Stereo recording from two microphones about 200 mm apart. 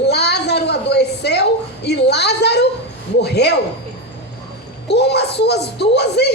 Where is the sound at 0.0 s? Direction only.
55° left (ahead or behind).